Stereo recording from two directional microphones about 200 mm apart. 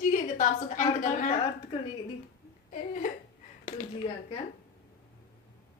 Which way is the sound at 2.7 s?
40° left (ahead or behind).